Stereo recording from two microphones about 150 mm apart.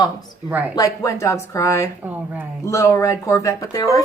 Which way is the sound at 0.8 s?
20° left (ahead or behind).